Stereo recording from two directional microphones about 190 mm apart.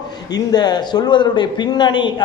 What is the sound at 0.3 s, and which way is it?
A man's voice, 20° left (ahead or behind).